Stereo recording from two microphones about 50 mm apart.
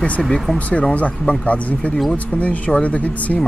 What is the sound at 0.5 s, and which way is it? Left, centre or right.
A man's voice, left.